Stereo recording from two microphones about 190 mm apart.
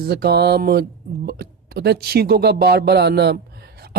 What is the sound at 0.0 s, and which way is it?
Speech, 60° right (ahead or behind).